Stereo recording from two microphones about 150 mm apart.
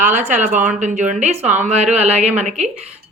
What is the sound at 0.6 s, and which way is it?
A woman's voice, 55° right (ahead or behind).